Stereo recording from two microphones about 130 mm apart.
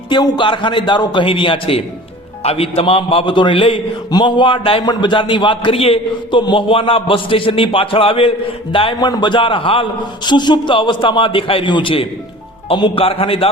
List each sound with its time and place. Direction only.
0.1 s a man's voice: 35° left (ahead or behind)